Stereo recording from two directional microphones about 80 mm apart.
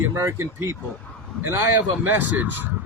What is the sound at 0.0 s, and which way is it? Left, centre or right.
Speech, right.